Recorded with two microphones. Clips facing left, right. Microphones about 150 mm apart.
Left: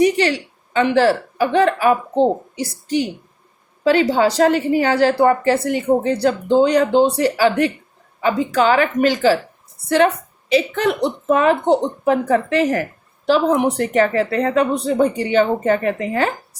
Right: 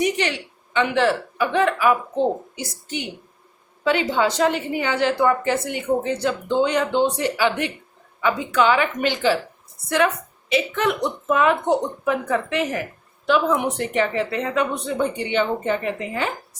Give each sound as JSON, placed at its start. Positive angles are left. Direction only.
{"t": 0.0, "sound": "speech", "side_deg": 35}
{"t": 10.5, "sound": "speech", "side_deg": 35}